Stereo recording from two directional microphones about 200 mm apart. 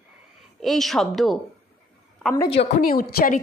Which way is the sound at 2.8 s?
50° left (ahead or behind).